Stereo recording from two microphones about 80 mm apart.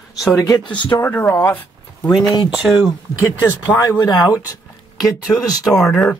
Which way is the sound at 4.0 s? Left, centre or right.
Left.